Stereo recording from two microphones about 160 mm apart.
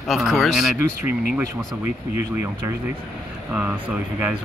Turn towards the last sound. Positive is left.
turn(degrees=-10)  # may be behind; listen again after turning